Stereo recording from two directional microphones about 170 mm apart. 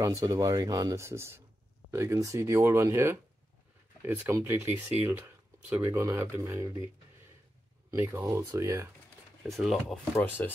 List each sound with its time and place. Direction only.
0.0 s speech: 20° right (ahead or behind)
7.9 s speech: 15° right (ahead or behind)
9.5 s speech: centre (ahead or behind)
10.4 s speech: 10° left (ahead or behind)